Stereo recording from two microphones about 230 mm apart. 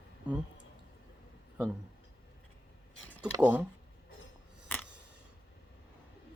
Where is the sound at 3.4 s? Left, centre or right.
Centre.